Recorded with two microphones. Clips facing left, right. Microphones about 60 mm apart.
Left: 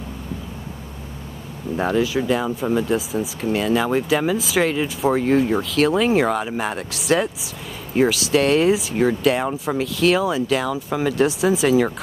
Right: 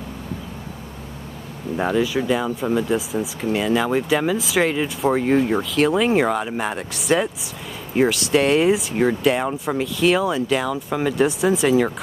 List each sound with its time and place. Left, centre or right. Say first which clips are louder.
1.8 s speech: even; centre
5.5 s speech: even; centre